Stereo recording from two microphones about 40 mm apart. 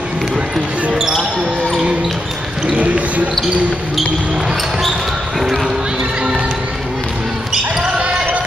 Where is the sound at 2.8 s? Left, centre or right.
Right.